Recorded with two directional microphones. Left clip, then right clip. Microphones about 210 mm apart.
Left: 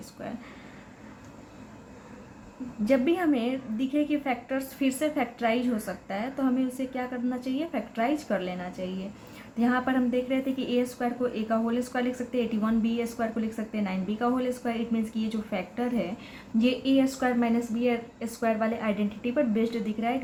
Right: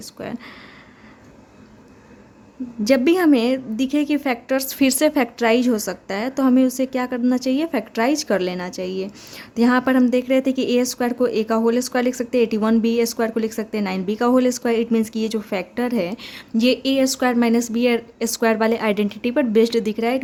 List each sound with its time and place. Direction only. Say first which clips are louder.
0.2 s a woman's voice: right 7 dB; 60° right (ahead or behind)
2.8 s a woman's voice: right 8 dB; 60° right (ahead or behind)